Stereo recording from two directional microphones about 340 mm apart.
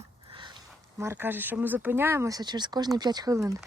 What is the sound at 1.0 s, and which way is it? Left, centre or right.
Speech, centre.